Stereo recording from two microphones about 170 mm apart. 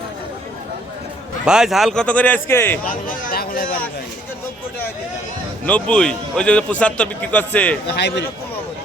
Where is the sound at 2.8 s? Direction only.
55° left (ahead or behind).